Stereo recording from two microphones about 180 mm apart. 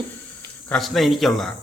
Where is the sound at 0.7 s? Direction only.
5° left (ahead or behind).